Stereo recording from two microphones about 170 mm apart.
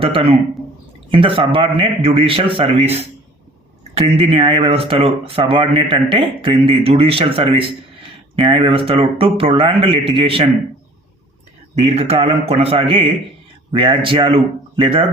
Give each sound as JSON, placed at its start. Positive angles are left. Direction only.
{"t": 0.0, "sound": "speech", "side_deg": -35}
{"t": 11.7, "sound": "speech", "side_deg": -40}